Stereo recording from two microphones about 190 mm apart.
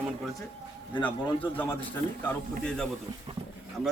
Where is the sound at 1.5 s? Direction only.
10° left (ahead or behind).